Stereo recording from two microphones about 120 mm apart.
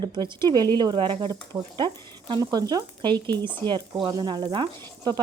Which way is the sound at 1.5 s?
20° right (ahead or behind).